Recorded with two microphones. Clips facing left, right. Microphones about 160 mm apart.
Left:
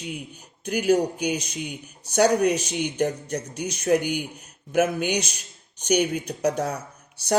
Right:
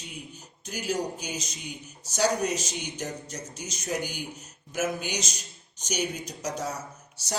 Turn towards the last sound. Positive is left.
turn(degrees=60)  # may be behind; listen again after turning